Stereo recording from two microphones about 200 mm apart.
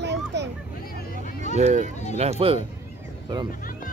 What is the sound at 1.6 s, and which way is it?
Speech, 35° right (ahead or behind).